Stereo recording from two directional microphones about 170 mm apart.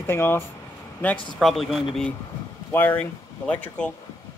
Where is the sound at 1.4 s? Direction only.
Centre (ahead or behind).